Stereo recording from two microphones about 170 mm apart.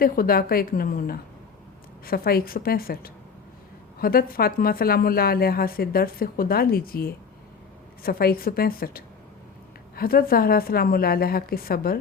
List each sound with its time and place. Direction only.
0.0 s a woman's voice: 60° left (ahead or behind)